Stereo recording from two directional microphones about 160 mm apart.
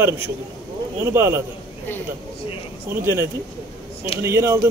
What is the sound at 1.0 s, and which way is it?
Speech, 15° right (ahead or behind).